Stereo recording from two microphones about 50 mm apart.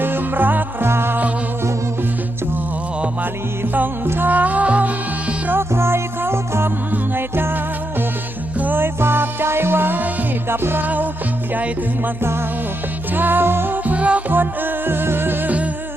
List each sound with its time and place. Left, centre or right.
0.0 s music: right
0.9 s music: right
3.6 s music: right
4.0 s music: right
4.3 s music: right
5.5 s music: right
6.9 s music: right
8.5 s music: right
8.8 s music: right
10.8 s music: right
12.2 s music: right
13.1 s music: right
14.3 s music: right